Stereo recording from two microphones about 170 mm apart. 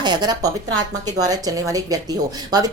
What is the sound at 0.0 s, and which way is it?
Speech, 25° right (ahead or behind).